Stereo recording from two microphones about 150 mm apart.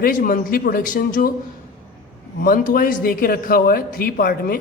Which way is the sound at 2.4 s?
70° left (ahead or behind).